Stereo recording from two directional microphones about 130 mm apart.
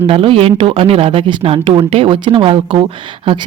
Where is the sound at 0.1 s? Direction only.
45° right (ahead or behind).